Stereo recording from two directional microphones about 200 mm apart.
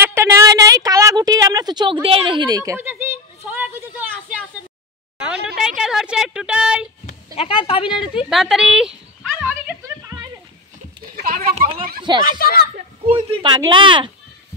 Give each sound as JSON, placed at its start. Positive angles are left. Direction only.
{"t": 0.0, "sound": "a sound", "side_deg": -15}
{"t": 5.6, "sound": "speech", "side_deg": -5}
{"t": 7.3, "sound": "speech", "side_deg": 30}
{"t": 8.3, "sound": "a sound", "side_deg": 0}
{"t": 11.1, "sound": "speech", "side_deg": -45}
{"t": 11.5, "sound": "speech", "side_deg": -25}
{"t": 12.3, "sound": "speech", "side_deg": 45}
{"t": 13.3, "sound": "speech", "side_deg": -25}